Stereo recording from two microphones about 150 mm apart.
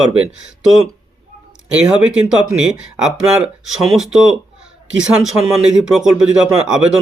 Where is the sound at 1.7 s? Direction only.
5° right (ahead or behind).